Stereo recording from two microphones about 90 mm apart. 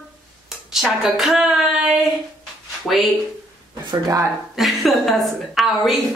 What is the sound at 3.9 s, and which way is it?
Speech, 40° right (ahead or behind).